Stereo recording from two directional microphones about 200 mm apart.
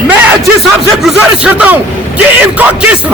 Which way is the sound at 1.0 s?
5° right (ahead or behind).